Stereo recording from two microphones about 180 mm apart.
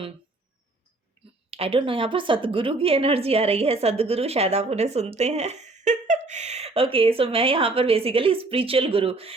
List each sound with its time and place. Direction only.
1.5 s a woman's voice: 30° right (ahead or behind)